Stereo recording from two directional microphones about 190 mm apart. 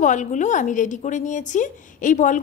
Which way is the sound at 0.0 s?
40° left (ahead or behind).